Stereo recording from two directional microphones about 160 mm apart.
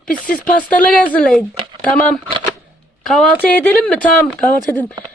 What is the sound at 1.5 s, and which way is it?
Speech, 30° right (ahead or behind).